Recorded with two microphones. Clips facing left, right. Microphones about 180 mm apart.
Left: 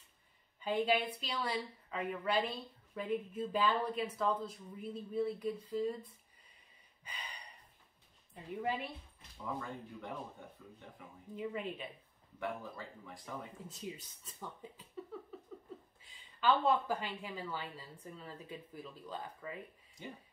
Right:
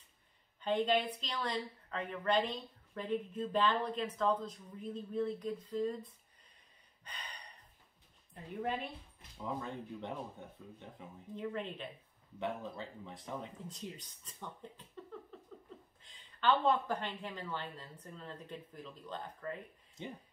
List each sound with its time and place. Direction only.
0.6 s a woman's voice: 10° left (ahead or behind)
7.1 s a sound: 10° left (ahead or behind)
8.6 s speech: 5° left (ahead or behind)
9.4 s speech: 20° right (ahead or behind)
11.3 s a woman's voice: 5° left (ahead or behind)
12.4 s speech: 20° right (ahead or behind)
13.7 s a woman's voice: 5° left (ahead or behind)
16.0 s a woman's voice: 10° left (ahead or behind)